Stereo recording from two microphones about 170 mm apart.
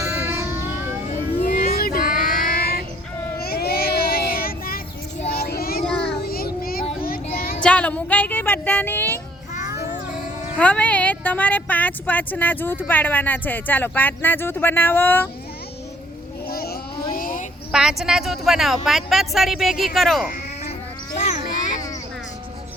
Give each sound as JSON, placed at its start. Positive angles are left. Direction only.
{"t": 0.0, "sound": "music", "side_deg": -15}
{"t": 1.4, "sound": "child singing", "side_deg": 45}
{"t": 5.8, "sound": "child singing", "side_deg": 5}
{"t": 6.2, "sound": "a sound", "side_deg": 60}
{"t": 7.0, "sound": "child singing", "side_deg": 60}
{"t": 7.6, "sound": "music", "side_deg": 5}
{"t": 10.6, "sound": "speech", "side_deg": 10}
{"t": 16.5, "sound": "a sound", "side_deg": 60}
{"t": 17.7, "sound": "speech", "side_deg": -5}
{"t": 21.2, "sound": "a sound", "side_deg": 40}